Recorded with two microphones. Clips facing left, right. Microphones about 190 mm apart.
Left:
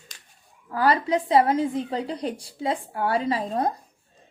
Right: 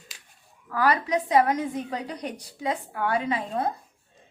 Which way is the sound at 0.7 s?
30° left (ahead or behind).